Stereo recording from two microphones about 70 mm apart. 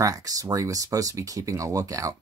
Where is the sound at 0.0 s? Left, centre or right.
Right.